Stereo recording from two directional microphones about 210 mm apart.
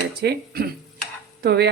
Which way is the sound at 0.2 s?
50° right (ahead or behind).